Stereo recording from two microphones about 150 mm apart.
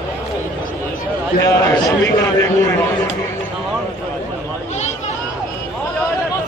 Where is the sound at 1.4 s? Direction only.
20° left (ahead or behind).